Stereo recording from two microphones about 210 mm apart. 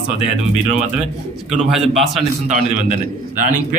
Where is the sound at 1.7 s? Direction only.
Centre (ahead or behind).